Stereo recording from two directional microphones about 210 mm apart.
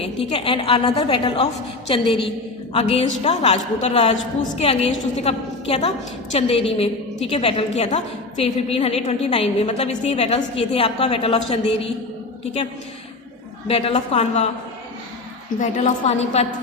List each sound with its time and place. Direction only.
0.0 s a woman's voice: 25° left (ahead or behind)
13.7 s a woman's voice: 30° left (ahead or behind)
15.6 s a woman's voice: 30° left (ahead or behind)